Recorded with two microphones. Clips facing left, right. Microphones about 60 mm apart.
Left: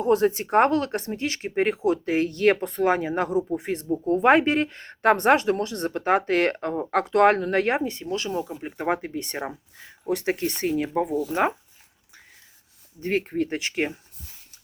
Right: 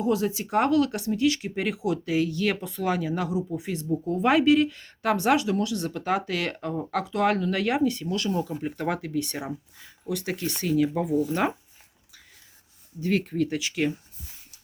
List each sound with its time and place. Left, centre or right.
0.0 s speech: left
8.1 s speech: centre
13.0 s speech: left